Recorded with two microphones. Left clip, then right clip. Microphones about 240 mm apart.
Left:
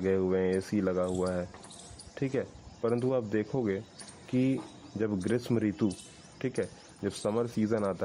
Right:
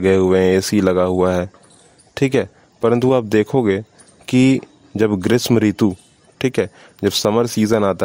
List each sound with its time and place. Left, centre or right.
0.0 s a man's voice: right